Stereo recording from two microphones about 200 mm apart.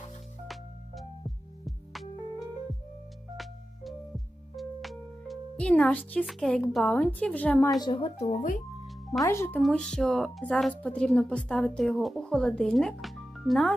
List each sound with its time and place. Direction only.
0.4 s music: centre (ahead or behind)
3.3 s music: centre (ahead or behind)
6.7 s a woman's voice: 5° left (ahead or behind)
7.8 s speech: 25° left (ahead or behind)
9.2 s a woman's voice: 15° left (ahead or behind)
9.6 s speech: centre (ahead or behind)